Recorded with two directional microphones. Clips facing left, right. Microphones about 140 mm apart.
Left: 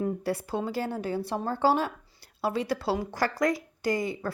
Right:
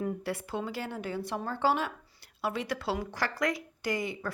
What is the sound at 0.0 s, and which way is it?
Speech, 35° left (ahead or behind).